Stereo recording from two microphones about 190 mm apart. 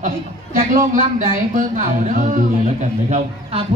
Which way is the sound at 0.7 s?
45° right (ahead or behind).